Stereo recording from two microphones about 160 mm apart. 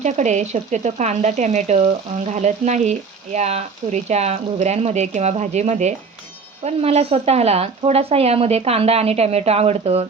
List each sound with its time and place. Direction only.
0.0 s speech: 45° right (ahead or behind)